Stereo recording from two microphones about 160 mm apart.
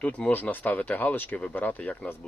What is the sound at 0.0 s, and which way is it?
Speech, 10° left (ahead or behind).